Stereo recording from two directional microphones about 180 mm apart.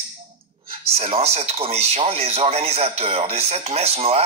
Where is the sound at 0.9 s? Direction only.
35° right (ahead or behind).